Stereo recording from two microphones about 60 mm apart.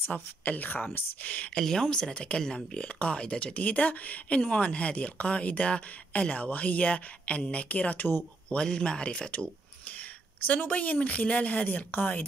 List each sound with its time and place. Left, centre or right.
0.0 s speech: left
1.6 s speech: centre; by 8.1 s left
8.5 s speech: centre